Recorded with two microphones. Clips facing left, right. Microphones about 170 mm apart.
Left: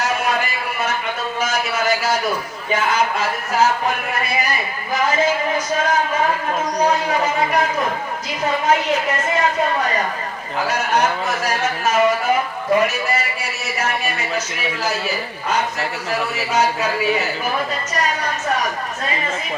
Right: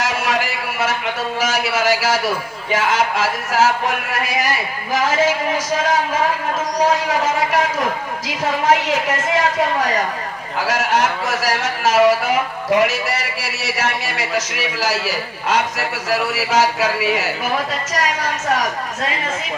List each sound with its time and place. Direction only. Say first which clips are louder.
0.0 s a sound: even; 90° right
1.4 s speech: right 2 dB; 90° right
8.7 s speech: right 1 dB; 90° right